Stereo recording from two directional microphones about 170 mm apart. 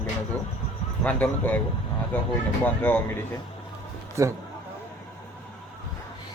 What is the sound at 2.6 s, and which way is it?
Speech, 10° left (ahead or behind).